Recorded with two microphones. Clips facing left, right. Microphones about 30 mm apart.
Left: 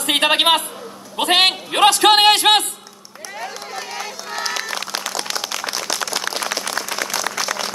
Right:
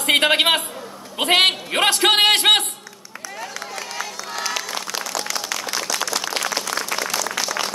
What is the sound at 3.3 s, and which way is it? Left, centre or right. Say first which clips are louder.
Run: left 2 dB; centre.